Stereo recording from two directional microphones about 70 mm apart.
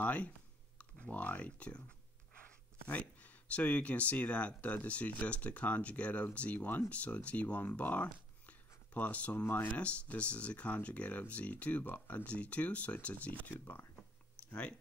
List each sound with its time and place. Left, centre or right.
0.0 s a sound: centre
0.7 s speech: centre
2.9 s speech: left
14.5 s speech: centre